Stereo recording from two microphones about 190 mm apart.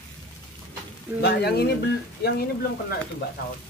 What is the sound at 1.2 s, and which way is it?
Speech, 60° left (ahead or behind).